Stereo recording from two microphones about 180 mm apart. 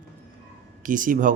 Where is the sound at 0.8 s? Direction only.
45° right (ahead or behind).